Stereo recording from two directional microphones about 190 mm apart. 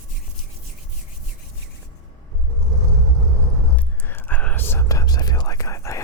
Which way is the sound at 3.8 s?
10° left (ahead or behind).